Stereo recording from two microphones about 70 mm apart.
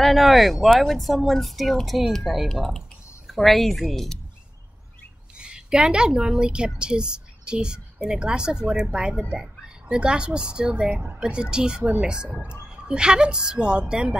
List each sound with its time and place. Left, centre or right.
0.0 s speech: centre
5.3 s a woman's voice: centre